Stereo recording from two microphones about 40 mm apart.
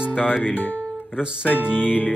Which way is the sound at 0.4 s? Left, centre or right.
Left.